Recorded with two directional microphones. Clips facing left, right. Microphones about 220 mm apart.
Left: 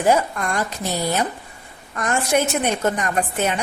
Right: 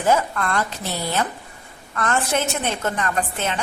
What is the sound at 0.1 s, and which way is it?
A woman's voice, 15° left (ahead or behind).